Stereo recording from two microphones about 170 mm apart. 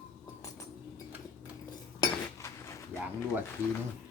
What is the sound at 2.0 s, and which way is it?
Cutlery, 15° left (ahead or behind).